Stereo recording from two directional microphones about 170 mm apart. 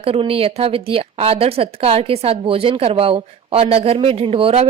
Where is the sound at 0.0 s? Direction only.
35° right (ahead or behind).